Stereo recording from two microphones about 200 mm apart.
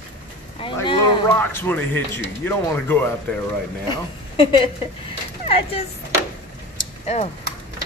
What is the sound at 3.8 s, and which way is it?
A woman's voice, 25° left (ahead or behind).